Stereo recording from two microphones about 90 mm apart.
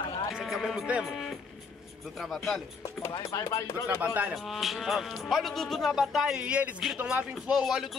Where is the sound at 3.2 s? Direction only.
35° left (ahead or behind).